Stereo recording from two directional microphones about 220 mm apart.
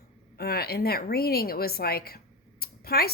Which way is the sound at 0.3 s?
45° left (ahead or behind).